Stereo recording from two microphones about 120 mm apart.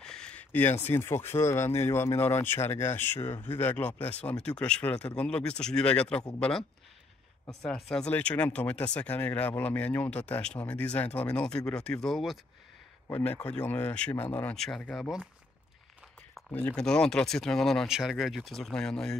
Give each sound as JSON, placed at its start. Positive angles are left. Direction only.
{"t": 0.0, "sound": "speech", "side_deg": 5}
{"t": 7.6, "sound": "speech", "side_deg": 5}
{"t": 13.1, "sound": "speech", "side_deg": 15}
{"t": 16.4, "sound": "speech", "side_deg": 15}